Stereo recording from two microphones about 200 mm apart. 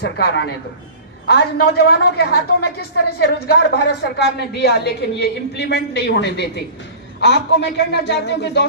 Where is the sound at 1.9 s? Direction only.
55° left (ahead or behind).